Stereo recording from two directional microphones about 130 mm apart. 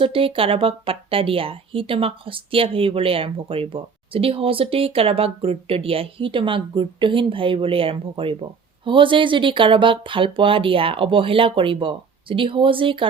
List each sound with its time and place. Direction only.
0.0 s a woman's voice: 45° right (ahead or behind)